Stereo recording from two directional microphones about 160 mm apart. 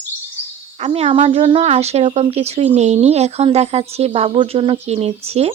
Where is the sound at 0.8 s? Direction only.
40° right (ahead or behind).